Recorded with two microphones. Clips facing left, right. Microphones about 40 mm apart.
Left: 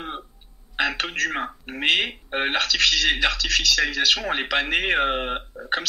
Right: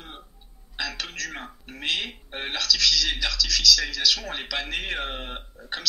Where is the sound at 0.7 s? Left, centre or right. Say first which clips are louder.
Left 8 dB; left.